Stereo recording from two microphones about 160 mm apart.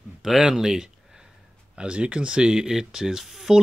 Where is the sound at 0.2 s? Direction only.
5° right (ahead or behind).